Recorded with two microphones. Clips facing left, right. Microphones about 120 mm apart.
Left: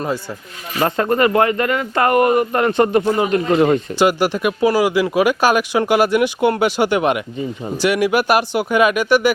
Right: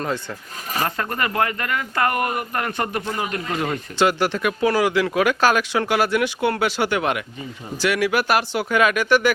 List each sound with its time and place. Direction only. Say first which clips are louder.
0.9 s speech: left 9 dB; 30° left (ahead or behind)
3.9 s speech: left 4 dB; 10° left (ahead or behind)